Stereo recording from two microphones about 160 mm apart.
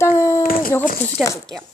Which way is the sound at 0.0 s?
20° left (ahead or behind).